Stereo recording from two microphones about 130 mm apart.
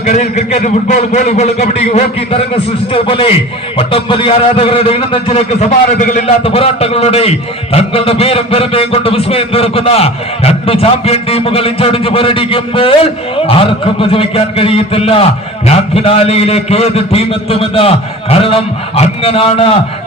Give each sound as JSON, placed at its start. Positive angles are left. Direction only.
{"t": 0.0, "sound": "a man's voice", "side_deg": 65}
{"t": 6.2, "sound": "a man's voice", "side_deg": 50}